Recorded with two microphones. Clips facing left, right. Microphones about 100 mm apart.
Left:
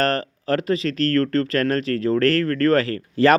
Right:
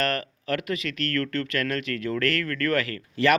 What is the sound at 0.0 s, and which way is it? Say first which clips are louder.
Speech: left 6 dB; 35° left (ahead or behind).